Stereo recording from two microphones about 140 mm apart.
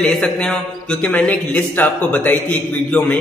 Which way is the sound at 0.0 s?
5° left (ahead or behind).